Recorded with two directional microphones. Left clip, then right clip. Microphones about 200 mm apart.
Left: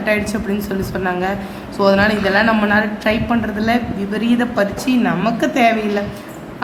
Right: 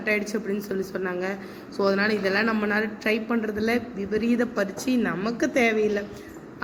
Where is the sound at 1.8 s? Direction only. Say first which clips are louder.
Left 9 dB; 10° right (ahead or behind).